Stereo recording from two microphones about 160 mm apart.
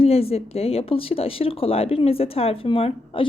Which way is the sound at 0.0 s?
40° left (ahead or behind).